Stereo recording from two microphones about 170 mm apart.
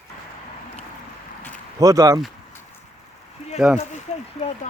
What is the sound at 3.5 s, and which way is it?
Speech, 5° right (ahead or behind).